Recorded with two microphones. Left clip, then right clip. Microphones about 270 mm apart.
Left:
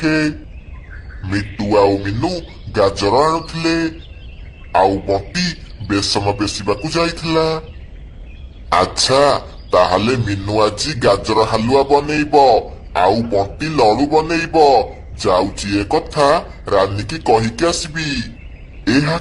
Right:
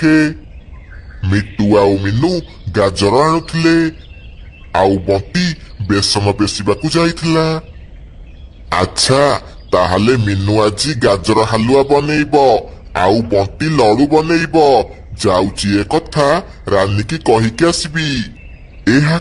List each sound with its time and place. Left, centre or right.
0.0 s a man's voice: right
8.7 s a man's voice: right